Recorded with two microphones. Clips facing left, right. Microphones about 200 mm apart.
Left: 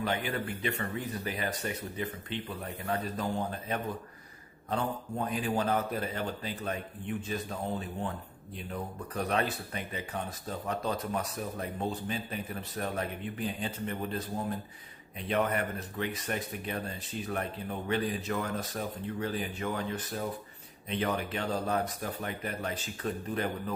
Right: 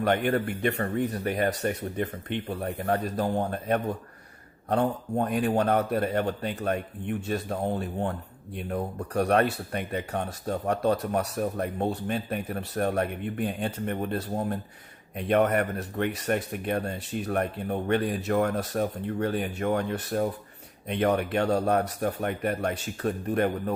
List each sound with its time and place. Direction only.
0.0 s speech: 60° right (ahead or behind)
1.5 s speech: 60° right (ahead or behind)
2.8 s speech: 45° right (ahead or behind)
3.2 s speech: 60° right (ahead or behind)
5.2 s speech: 65° right (ahead or behind)
7.4 s speech: 50° right (ahead or behind)